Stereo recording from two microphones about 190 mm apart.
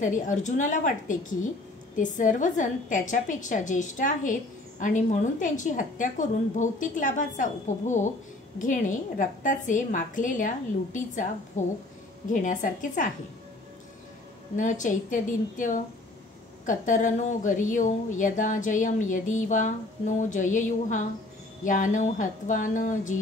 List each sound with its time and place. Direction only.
0.0 s a woman's voice: 40° left (ahead or behind)
14.6 s a woman's voice: 40° left (ahead or behind)